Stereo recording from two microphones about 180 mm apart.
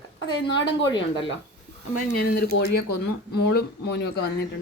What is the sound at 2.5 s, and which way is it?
Speech, 90° left.